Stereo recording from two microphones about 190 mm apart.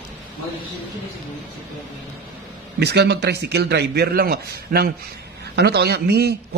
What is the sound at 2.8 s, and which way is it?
A man's voice, 60° right (ahead or behind).